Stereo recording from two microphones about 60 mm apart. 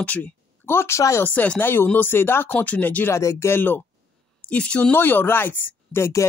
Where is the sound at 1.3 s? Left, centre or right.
Left.